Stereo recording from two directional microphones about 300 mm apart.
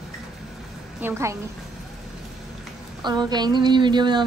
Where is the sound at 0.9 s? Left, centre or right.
Centre.